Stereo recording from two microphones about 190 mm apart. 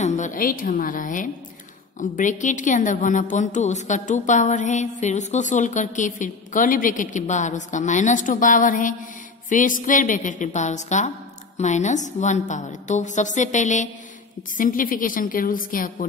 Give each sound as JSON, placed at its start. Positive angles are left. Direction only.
{"t": 0.0, "sound": "a woman's voice", "side_deg": 40}